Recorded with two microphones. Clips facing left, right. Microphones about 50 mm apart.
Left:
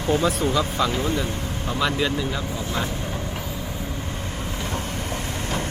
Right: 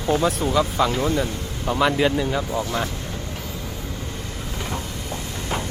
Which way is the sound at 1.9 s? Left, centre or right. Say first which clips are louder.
Right 4 dB; right.